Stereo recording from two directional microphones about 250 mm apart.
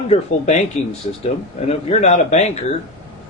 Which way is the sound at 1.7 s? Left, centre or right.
Left.